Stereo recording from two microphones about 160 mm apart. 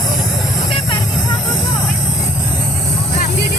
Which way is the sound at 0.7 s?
30° left (ahead or behind).